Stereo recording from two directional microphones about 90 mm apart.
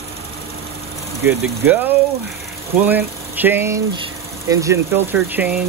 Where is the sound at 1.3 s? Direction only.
25° right (ahead or behind).